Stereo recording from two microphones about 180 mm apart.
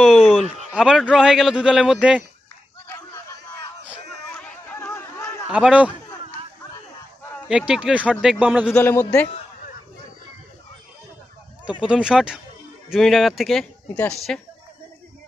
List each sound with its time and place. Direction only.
0.0 s a sound: 5° right (ahead or behind)
0.7 s a man's voice: 5° right (ahead or behind)
2.9 s a sound: 15° left (ahead or behind)
4.4 s chatter: 10° left (ahead or behind)
5.5 s speech: 5° right (ahead or behind)
7.4 s speech: 5° right (ahead or behind)
8.7 s a man's voice: 10° left (ahead or behind)
11.8 s a woman's voice: 5° right (ahead or behind)